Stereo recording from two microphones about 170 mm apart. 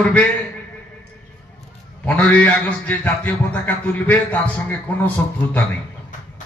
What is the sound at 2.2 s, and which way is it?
A man's voice, 10° left (ahead or behind).